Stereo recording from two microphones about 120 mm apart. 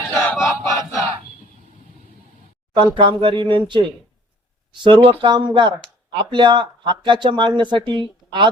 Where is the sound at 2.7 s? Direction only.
45° right (ahead or behind).